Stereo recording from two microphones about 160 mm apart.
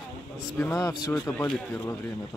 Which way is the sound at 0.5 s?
10° left (ahead or behind).